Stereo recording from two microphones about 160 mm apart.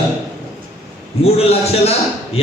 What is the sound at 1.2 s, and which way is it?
Speech, 40° left (ahead or behind).